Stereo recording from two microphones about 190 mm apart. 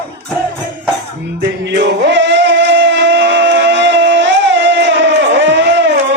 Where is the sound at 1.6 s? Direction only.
65° right (ahead or behind).